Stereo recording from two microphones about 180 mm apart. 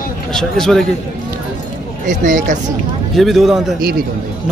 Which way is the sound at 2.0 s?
45° right (ahead or behind).